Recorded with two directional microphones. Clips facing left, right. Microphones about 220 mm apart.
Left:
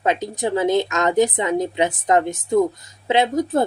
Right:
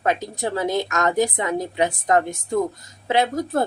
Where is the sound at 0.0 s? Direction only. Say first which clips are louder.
Left 2 dB; 20° left (ahead or behind).